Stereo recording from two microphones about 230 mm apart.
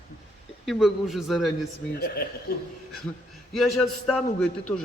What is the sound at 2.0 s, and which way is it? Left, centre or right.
Speech, left.